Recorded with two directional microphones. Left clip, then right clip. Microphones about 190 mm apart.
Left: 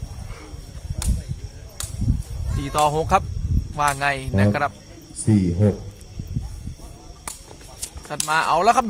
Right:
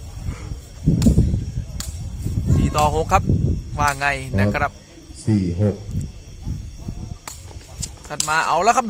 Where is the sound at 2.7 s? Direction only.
10° right (ahead or behind).